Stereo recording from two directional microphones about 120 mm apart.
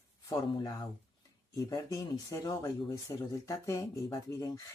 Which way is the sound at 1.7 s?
30° left (ahead or behind).